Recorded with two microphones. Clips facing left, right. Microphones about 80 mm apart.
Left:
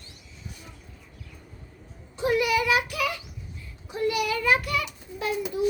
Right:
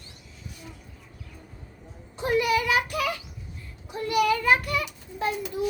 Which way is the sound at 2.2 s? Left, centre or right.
Right.